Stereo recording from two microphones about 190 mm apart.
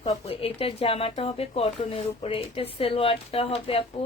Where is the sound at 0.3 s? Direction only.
30° left (ahead or behind).